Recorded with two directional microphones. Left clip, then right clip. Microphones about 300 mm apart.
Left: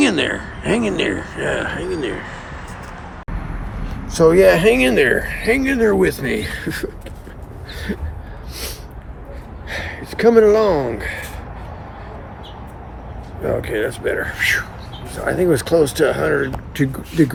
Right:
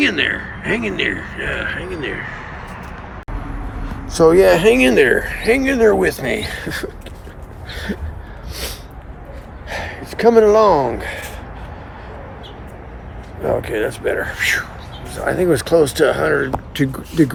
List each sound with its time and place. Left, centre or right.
0.0 s a man's voice: centre
3.8 s speech: centre
9.6 s speech: centre
13.4 s speech: centre